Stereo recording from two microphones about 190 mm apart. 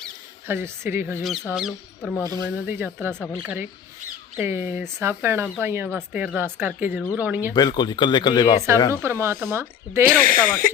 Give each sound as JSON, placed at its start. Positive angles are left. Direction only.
{"t": 0.4, "sound": "speech", "side_deg": -10}
{"t": 2.2, "sound": "speech", "side_deg": -15}
{"t": 7.5, "sound": "speech", "side_deg": 20}
{"t": 8.9, "sound": "speech", "side_deg": -15}
{"t": 10.1, "sound": "speech", "side_deg": -45}